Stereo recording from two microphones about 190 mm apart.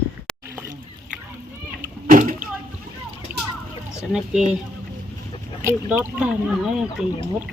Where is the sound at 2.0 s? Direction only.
45° right (ahead or behind).